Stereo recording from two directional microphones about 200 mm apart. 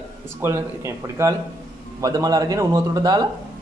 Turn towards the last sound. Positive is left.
turn(degrees=-20)  # may be behind; listen again after turning